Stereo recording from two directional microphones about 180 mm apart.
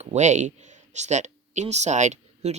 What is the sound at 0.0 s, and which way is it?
Speech, 40° right (ahead or behind).